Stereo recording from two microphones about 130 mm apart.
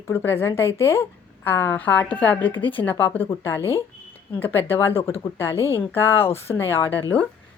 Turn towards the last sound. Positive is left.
turn(degrees=15)  # may be behind; listen again after turning